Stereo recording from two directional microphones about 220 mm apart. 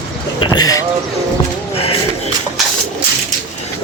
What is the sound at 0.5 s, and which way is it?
Speech, 15° left (ahead or behind).